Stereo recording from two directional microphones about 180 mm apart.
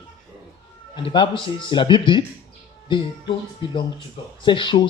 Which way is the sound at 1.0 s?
30° left (ahead or behind).